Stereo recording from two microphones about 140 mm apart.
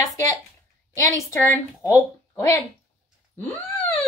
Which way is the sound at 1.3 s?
20° left (ahead or behind).